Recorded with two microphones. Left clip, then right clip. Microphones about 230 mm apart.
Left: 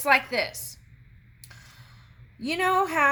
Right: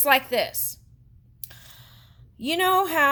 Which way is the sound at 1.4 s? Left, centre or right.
Right.